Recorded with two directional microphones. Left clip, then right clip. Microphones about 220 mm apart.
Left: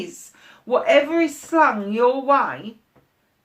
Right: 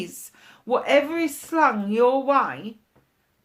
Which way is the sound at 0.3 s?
45° right (ahead or behind).